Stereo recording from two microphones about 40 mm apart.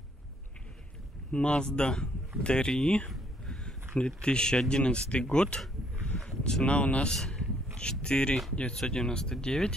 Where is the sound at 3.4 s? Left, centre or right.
Left.